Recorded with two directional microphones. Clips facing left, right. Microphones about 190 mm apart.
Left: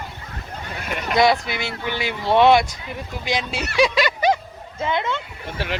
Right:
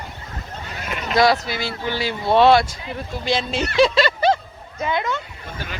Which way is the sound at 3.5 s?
10° left (ahead or behind).